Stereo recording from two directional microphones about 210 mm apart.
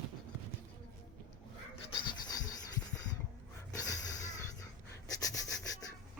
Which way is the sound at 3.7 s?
15° left (ahead or behind).